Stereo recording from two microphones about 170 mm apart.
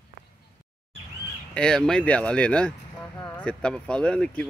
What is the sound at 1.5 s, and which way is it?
Speech, 5° left (ahead or behind).